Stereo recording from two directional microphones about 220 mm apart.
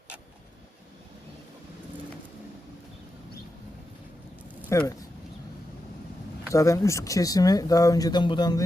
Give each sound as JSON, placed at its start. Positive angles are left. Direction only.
{"t": 4.7, "sound": "speech", "side_deg": 15}
{"t": 6.5, "sound": "speech", "side_deg": 15}